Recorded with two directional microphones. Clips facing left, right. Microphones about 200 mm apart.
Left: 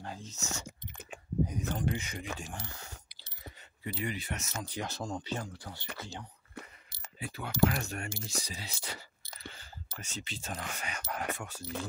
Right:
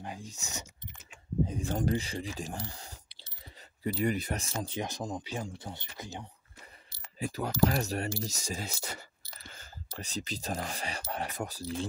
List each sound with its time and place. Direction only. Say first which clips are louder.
0.0 s speech: right 1 dB; 15° right (ahead or behind)
0.7 s a sound: left 6 dB; 55° left (ahead or behind)
1.8 s speech: right 4 dB; 35° right (ahead or behind)
4.6 s speech: right 2 dB; 20° right (ahead or behind)
5.4 s speech: right 3 dB; 25° right (ahead or behind)
7.2 s speech: right 1 dB; 40° right (ahead or behind)